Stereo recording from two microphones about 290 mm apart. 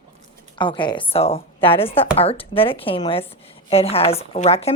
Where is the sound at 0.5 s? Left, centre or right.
Centre.